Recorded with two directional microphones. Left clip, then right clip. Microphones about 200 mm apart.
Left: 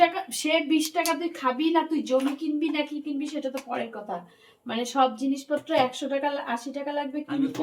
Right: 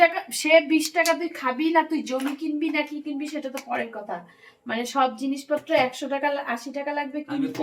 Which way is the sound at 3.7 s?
10° left (ahead or behind).